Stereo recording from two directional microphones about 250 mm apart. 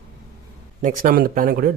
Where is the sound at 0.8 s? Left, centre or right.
Right.